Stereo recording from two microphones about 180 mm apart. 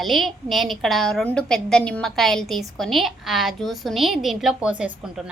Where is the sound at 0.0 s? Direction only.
Centre (ahead or behind).